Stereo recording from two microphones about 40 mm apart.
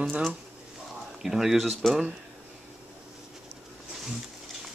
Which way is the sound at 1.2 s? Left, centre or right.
Centre.